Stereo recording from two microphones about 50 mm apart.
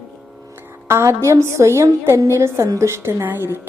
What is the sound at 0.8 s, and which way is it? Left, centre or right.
A woman's voice, right.